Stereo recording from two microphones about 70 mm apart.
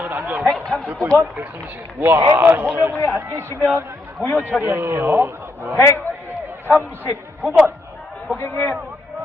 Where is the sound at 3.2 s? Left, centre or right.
Right.